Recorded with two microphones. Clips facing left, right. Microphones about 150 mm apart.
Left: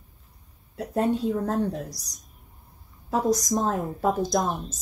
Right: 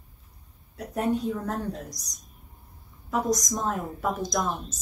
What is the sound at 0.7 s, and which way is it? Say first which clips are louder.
A woman's voice: left 2 dB; 25° left (ahead or behind).